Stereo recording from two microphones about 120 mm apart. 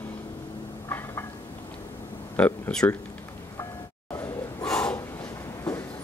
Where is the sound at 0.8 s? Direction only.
20° left (ahead or behind).